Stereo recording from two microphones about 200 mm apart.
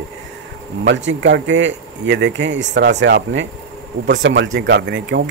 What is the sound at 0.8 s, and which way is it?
Speech, 65° right (ahead or behind).